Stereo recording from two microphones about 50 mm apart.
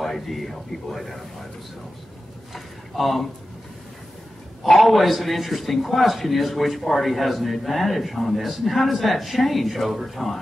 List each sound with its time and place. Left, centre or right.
0.0 s a man's voice: centre
2.5 s a man's voice: centre
4.6 s a man's voice: centre